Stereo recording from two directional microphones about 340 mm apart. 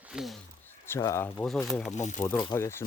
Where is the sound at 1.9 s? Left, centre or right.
Left.